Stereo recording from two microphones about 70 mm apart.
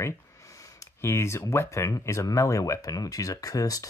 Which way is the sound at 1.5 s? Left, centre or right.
Left.